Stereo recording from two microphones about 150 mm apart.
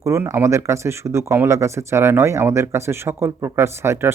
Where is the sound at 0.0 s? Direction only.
20° right (ahead or behind).